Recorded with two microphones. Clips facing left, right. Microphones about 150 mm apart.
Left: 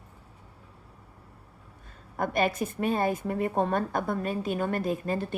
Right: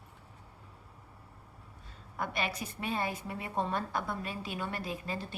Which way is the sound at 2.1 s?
45° left (ahead or behind).